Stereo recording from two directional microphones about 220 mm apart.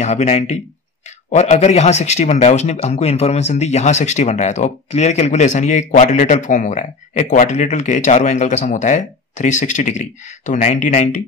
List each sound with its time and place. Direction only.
0.0 s a man's voice: 30° left (ahead or behind)